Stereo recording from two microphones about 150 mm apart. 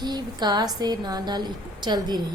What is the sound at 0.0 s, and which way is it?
A woman's voice, 30° right (ahead or behind).